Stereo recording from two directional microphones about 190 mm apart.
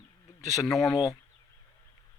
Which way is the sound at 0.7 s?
Centre (ahead or behind).